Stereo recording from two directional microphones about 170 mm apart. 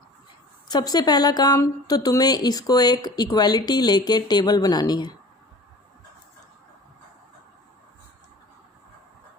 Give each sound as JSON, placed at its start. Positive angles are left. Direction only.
{"t": 0.7, "sound": "a woman's voice", "side_deg": 25}